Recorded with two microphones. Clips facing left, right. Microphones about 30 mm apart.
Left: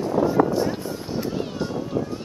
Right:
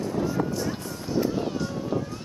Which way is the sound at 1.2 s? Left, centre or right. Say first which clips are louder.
Right 2 dB; centre.